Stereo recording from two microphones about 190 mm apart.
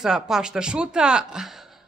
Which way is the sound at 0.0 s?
Centre (ahead or behind).